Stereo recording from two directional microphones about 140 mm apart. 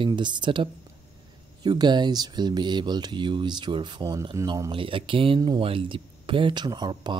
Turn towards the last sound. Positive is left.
turn(degrees=-30)  # may be behind; listen again after turning